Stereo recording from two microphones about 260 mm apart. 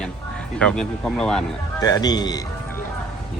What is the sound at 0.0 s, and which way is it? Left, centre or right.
Speech, centre.